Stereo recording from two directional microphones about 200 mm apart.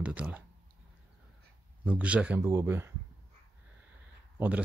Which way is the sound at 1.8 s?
5° right (ahead or behind).